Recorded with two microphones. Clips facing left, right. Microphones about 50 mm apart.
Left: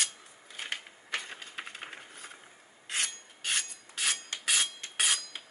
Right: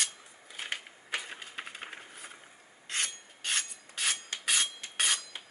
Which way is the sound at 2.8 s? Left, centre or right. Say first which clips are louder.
Left 1 dB; centre.